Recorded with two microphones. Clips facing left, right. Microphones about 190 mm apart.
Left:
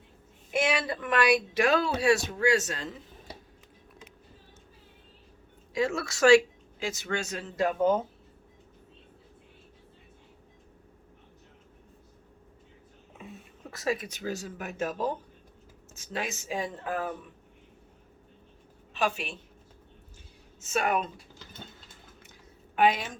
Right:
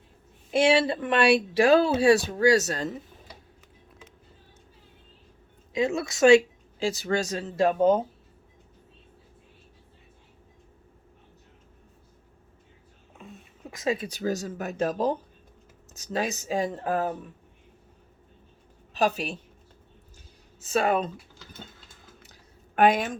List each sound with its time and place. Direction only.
0.5 s speech: 30° right (ahead or behind)
5.7 s speech: 20° right (ahead or behind)
13.1 s a sound: centre (ahead or behind)
13.7 s speech: 20° right (ahead or behind); by 17.2 s 40° right (ahead or behind)
18.9 s speech: 40° right (ahead or behind)
20.6 s speech: 35° right (ahead or behind)
22.2 s a sound: 40° right (ahead or behind)